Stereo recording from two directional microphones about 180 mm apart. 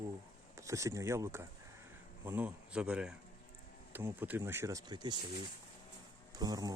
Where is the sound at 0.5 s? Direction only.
15° right (ahead or behind).